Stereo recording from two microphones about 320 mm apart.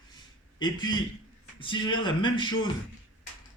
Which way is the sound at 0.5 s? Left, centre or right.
Centre.